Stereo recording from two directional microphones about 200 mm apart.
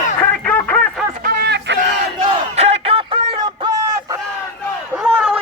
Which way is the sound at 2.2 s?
30° right (ahead or behind).